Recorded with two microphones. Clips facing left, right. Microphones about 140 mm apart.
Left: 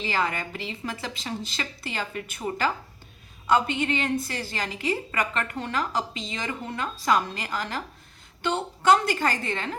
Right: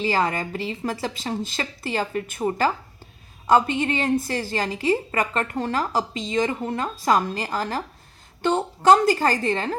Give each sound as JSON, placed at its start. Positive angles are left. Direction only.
{"t": 0.0, "sound": "a woman's voice", "side_deg": -40}